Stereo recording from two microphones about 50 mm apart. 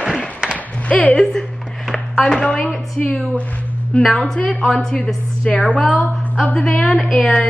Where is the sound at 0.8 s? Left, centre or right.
Left.